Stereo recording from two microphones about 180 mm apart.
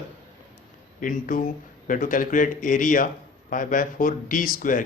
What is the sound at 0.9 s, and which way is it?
Speech, 50° left (ahead or behind).